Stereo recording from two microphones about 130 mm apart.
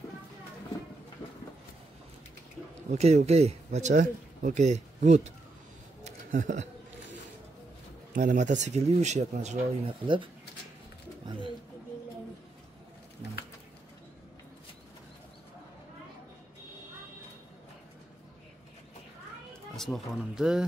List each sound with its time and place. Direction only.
2.9 s speech: 60° right (ahead or behind)
6.0 s a sound: 70° right (ahead or behind)
8.1 s speech: 85° right; by 9.8 s 60° right (ahead or behind)
9.8 s speech: 40° right (ahead or behind)
11.2 s speech: 40° right (ahead or behind)
19.7 s speech: centre (ahead or behind)